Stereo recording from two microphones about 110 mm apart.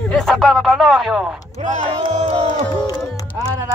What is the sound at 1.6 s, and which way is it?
Music, 80° right.